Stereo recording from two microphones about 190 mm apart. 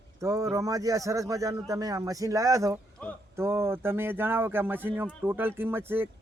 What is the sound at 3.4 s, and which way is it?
Speech, 15° right (ahead or behind).